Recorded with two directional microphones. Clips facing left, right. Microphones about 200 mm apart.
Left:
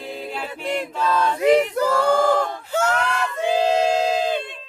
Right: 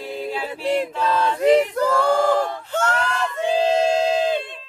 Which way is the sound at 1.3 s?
5° left (ahead or behind).